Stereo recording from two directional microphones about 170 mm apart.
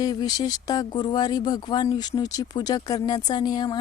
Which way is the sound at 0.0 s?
25° left (ahead or behind).